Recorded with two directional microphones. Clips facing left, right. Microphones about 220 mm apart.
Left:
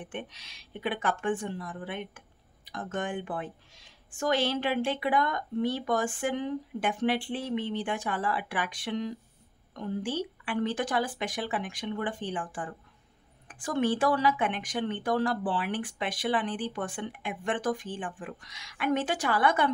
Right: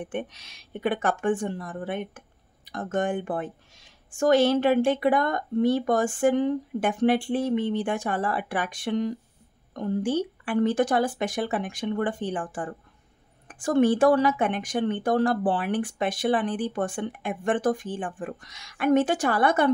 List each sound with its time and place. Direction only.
0.0 s speech: 50° right (ahead or behind)